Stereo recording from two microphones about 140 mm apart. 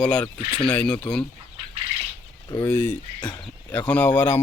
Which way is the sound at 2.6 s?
15° left (ahead or behind).